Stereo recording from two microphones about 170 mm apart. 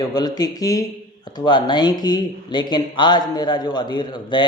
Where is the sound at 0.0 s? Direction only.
25° left (ahead or behind).